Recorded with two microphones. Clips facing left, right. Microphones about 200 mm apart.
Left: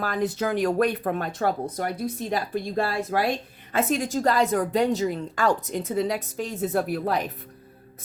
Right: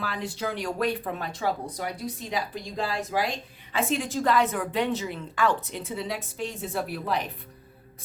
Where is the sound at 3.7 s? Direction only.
45° left (ahead or behind).